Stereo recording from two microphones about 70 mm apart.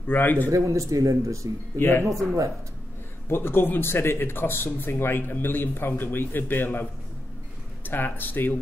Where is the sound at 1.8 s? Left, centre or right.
Left.